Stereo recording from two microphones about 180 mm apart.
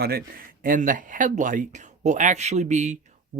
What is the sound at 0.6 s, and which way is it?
Speech, 50° right (ahead or behind).